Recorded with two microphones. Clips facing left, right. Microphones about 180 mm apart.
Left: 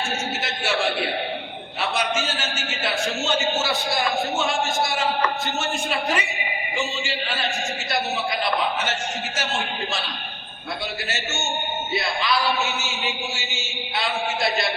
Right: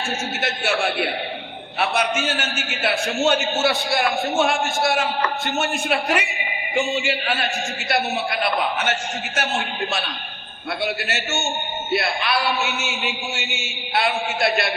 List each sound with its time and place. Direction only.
2.0 s a man's voice: 60° right (ahead or behind)
11.9 s a man's voice: 60° right (ahead or behind)
13.9 s a man's voice: 60° right (ahead or behind)